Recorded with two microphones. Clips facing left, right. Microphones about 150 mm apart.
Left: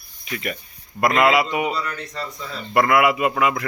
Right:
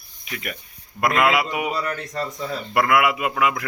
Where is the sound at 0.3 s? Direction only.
Centre (ahead or behind).